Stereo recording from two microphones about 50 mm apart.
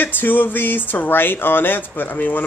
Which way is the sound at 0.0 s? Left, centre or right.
Left.